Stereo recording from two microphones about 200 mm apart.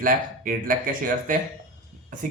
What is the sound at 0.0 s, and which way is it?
Speech, 45° right (ahead or behind).